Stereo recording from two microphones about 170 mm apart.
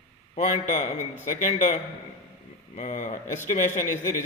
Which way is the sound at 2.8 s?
45° left (ahead or behind).